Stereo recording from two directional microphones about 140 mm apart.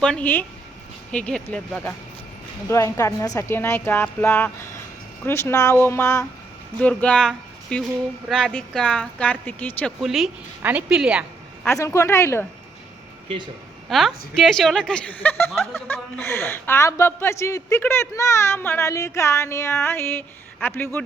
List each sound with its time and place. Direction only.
0.0 s speech: 10° left (ahead or behind)
2.6 s speech: 20° left (ahead or behind)
6.7 s speech: 10° left (ahead or behind)
10.0 s a woman's voice: centre (ahead or behind)
11.8 s speech: 20° left (ahead or behind)
13.2 s speech: 35° right (ahead or behind)
13.9 s a woman's voice: centre (ahead or behind)